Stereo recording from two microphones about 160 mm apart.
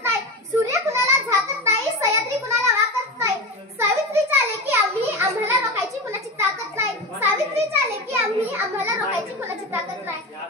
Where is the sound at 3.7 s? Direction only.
15° right (ahead or behind).